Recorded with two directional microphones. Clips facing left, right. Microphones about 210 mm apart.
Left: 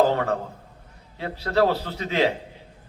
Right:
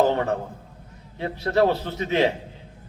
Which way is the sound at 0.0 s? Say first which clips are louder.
Even; 20° right (ahead or behind).